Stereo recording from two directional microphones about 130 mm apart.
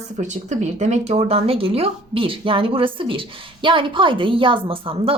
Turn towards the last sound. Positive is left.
turn(degrees=-45)  # may be behind; listen again after turning